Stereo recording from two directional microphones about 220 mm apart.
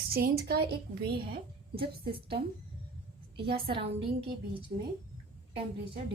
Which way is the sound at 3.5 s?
25° right (ahead or behind).